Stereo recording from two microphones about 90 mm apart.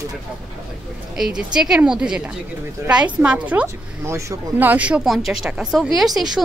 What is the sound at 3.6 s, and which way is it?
Speech, 35° right (ahead or behind).